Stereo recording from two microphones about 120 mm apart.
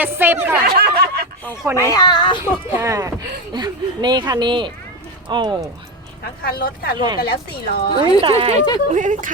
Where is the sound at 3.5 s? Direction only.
35° right (ahead or behind).